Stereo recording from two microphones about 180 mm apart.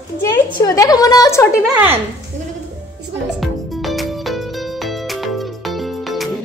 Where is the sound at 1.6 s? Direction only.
10° right (ahead or behind).